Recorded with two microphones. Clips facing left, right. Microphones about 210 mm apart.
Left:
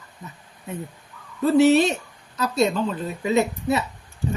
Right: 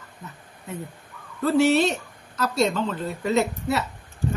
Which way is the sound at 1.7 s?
15° left (ahead or behind).